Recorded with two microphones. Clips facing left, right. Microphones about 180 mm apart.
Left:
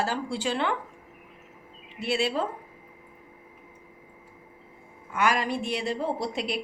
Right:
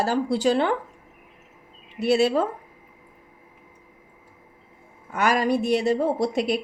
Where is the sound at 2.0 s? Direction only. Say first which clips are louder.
Right 7 dB; 45° right (ahead or behind).